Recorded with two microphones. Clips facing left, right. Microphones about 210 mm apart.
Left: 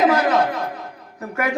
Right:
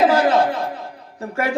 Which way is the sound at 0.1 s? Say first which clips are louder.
Right 2 dB; 30° right (ahead or behind).